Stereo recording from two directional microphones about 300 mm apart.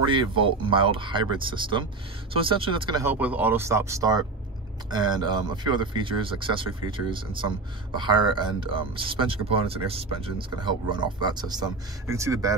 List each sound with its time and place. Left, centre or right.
0.0 s speech: centre